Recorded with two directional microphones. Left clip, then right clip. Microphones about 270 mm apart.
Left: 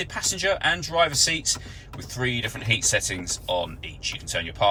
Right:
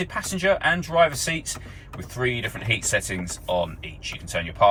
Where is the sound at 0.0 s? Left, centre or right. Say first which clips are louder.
Right 1 dB; centre.